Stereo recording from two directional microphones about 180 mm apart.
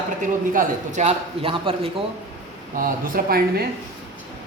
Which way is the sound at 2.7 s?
50° right (ahead or behind).